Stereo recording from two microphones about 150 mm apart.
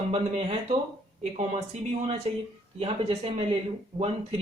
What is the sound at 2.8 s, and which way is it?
Speech, 40° right (ahead or behind).